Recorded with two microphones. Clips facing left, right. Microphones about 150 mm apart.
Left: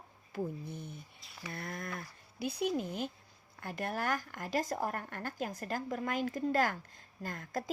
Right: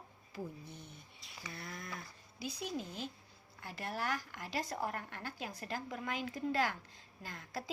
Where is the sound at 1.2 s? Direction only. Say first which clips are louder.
Even; centre (ahead or behind).